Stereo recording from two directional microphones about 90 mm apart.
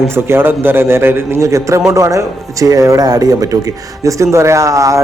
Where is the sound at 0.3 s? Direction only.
25° right (ahead or behind).